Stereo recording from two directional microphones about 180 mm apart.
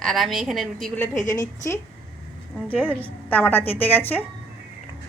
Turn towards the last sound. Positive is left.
turn(degrees=10)  # may be behind; listen again after turning